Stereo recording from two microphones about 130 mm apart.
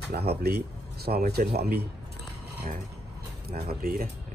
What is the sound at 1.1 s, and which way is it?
Speech, 90° right.